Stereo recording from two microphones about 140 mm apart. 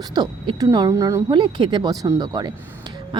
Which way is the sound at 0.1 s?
30° right (ahead or behind).